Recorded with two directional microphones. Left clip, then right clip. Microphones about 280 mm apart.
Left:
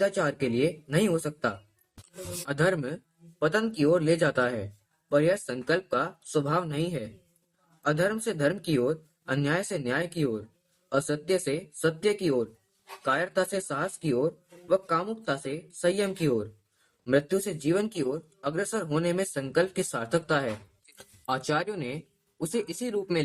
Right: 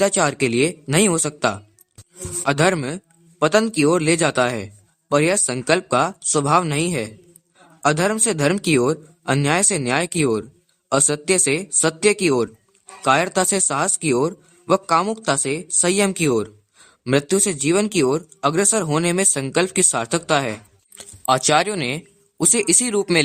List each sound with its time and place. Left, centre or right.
0.0 s speech: right